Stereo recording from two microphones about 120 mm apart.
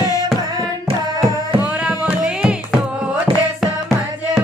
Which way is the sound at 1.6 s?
10° right (ahead or behind).